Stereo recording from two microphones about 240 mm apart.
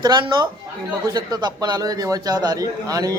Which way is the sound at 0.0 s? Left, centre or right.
Centre.